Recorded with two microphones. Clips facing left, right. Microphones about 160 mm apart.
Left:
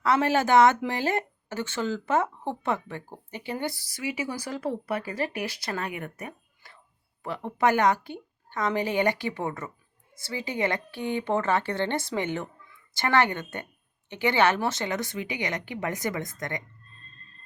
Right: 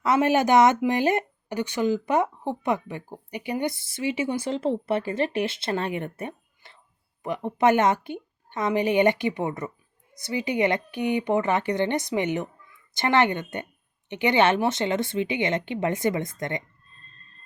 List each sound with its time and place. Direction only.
0.0 s a woman's voice: 20° right (ahead or behind)